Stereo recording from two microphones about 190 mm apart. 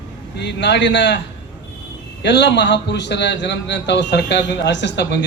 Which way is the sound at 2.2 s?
65° left (ahead or behind).